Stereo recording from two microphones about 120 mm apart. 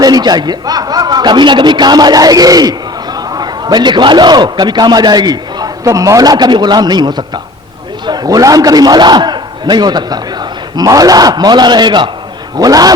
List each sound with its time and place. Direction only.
0.0 s a man's voice: 35° right (ahead or behind)